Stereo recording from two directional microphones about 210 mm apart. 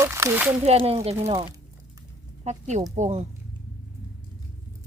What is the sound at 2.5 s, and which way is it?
Speech, 35° right (ahead or behind).